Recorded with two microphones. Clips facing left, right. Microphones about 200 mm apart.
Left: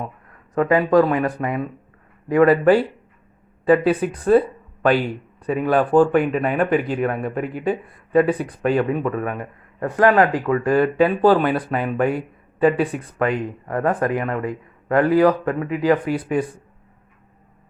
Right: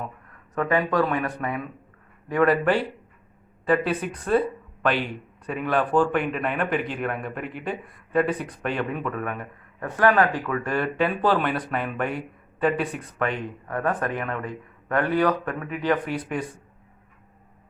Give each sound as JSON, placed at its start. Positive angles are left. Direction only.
{"t": 0.5, "sound": "speech", "side_deg": 35}
{"t": 2.3, "sound": "speech", "side_deg": 35}
{"t": 5.5, "sound": "speech", "side_deg": 40}